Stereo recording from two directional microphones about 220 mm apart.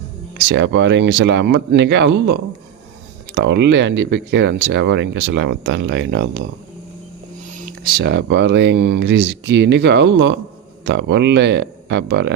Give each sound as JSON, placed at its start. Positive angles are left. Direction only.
{"t": 0.3, "sound": "speech", "side_deg": -55}
{"t": 7.5, "sound": "speech", "side_deg": -40}